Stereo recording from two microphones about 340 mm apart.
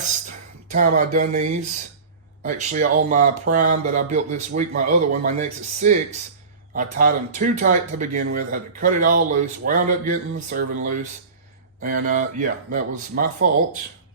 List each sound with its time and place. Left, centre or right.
0.7 s speech: right